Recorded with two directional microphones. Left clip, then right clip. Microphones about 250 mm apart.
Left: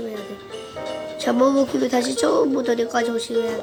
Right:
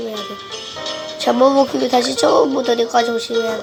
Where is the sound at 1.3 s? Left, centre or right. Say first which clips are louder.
Right 5 dB; centre.